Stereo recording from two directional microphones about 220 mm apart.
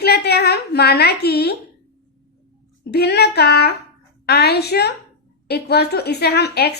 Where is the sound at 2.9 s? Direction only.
50° left (ahead or behind).